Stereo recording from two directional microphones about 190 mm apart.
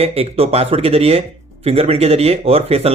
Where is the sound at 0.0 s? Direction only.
30° right (ahead or behind).